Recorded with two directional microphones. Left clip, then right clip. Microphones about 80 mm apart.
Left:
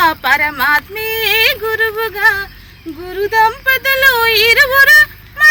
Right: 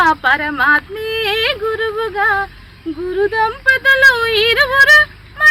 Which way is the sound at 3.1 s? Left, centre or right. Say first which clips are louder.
Left 4 dB; right.